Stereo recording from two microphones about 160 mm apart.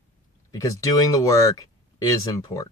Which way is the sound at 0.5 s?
20° left (ahead or behind).